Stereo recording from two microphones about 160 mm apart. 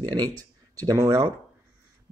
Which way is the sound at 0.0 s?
25° right (ahead or behind).